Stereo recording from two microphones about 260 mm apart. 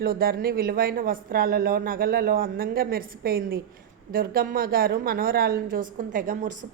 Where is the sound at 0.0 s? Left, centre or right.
Right.